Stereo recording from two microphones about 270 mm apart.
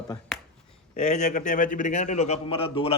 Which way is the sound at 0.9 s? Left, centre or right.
Left.